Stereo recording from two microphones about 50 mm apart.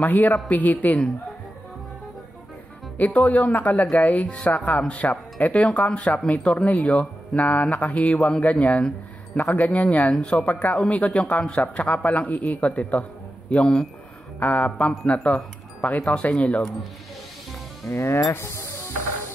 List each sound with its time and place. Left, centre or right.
0.0 s speech: left
3.0 s speech: left
17.8 s speech: left
18.4 s mechanisms: left